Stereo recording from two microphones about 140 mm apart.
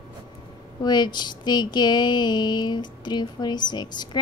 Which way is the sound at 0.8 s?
30° left (ahead or behind).